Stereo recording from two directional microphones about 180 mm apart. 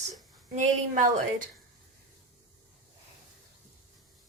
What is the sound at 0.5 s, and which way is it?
Speech, 45° right (ahead or behind).